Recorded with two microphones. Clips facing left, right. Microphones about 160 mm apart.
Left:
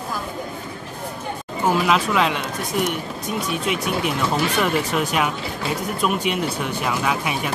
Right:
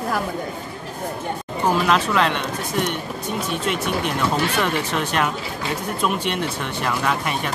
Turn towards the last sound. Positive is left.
turn(degrees=5)  # may be behind; listen again after turning